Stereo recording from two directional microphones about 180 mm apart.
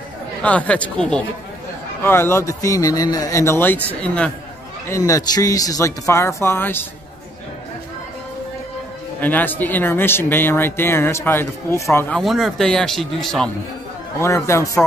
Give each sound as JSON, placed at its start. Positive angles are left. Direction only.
{"t": 0.4, "sound": "speech", "side_deg": 5}
{"t": 9.2, "sound": "speech", "side_deg": 10}
{"t": 12.2, "sound": "speech", "side_deg": 0}
{"t": 14.2, "sound": "speech", "side_deg": 15}